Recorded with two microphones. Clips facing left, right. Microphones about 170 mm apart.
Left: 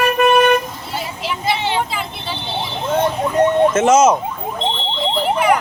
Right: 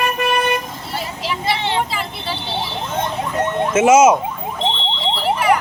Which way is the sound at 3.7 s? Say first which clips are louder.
Right 1 dB; 10° right (ahead or behind).